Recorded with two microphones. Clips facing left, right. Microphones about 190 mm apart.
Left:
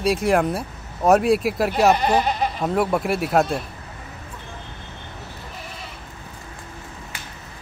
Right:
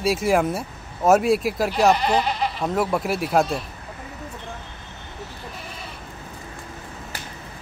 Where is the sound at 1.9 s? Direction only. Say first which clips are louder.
Left 2 dB; 50° left (ahead or behind).